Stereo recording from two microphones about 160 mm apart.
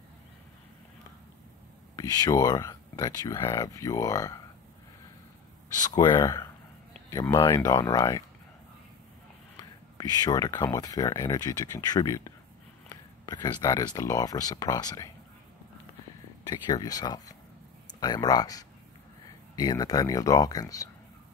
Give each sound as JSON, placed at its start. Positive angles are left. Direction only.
{"t": 2.0, "sound": "speech", "side_deg": 25}
{"t": 5.9, "sound": "speech", "side_deg": 25}
{"t": 9.9, "sound": "speech", "side_deg": 25}
{"t": 16.4, "sound": "speech", "side_deg": 25}